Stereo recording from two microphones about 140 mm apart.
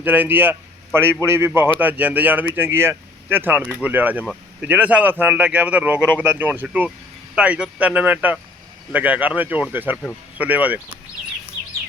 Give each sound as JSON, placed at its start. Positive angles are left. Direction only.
{"t": 0.0, "sound": "speech", "side_deg": -15}